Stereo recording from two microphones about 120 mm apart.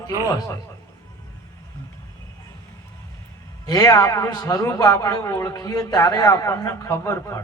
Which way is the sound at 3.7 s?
30° left (ahead or behind).